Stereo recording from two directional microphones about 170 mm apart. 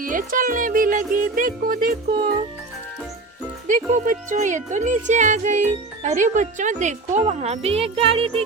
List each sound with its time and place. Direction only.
0.0 s speech: 55° right (ahead or behind)
3.7 s speech: 45° right (ahead or behind)
7.3 s music: 40° right (ahead or behind)